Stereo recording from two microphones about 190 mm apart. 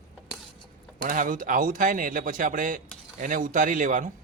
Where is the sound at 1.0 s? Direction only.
45° right (ahead or behind).